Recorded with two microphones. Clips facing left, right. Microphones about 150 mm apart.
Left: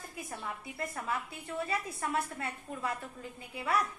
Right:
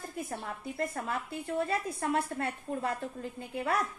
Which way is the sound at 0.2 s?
45° right (ahead or behind).